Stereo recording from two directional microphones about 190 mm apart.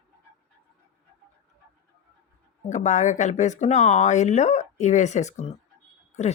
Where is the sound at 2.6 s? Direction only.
40° left (ahead or behind).